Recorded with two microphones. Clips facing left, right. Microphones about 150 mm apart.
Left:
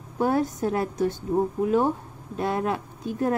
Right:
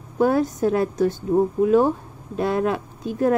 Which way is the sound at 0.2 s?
90° right.